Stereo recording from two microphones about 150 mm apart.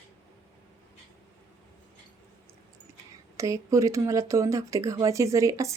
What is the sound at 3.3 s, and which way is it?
Speech, 20° right (ahead or behind).